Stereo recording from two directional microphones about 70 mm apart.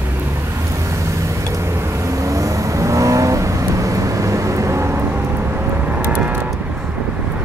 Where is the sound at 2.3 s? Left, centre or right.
Right.